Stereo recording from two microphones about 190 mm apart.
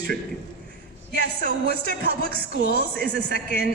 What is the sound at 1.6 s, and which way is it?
A woman's voice, 60° left (ahead or behind).